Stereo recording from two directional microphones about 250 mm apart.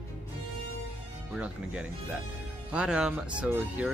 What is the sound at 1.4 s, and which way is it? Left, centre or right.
Speech, centre.